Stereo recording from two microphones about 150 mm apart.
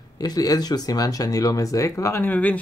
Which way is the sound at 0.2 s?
25° left (ahead or behind).